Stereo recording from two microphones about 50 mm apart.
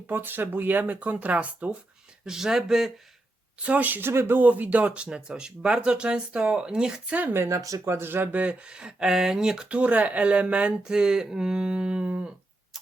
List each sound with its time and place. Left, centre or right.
0.1 s speech: right
2.2 s speech: centre
3.6 s speech: right
4.0 s speech: right
4.4 s speech: right; by 7.0 s centre
7.1 s speech: right
7.4 s speech: right
7.9 s speech: right
8.3 s speech: right